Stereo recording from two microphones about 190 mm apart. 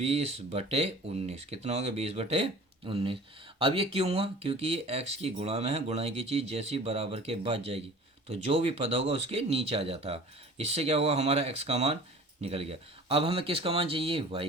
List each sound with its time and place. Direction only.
0.0 s speech: 35° right (ahead or behind)